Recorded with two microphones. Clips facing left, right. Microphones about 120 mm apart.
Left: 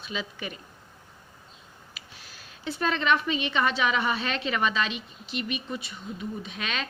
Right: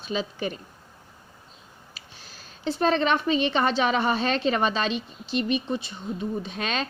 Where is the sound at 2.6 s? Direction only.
30° right (ahead or behind).